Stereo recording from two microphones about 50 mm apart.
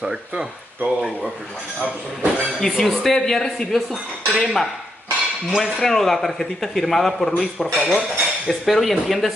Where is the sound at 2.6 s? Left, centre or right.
Centre.